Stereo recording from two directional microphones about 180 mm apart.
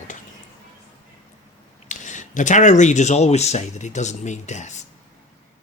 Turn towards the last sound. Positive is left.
turn(degrees=40)  # may be behind; listen again after turning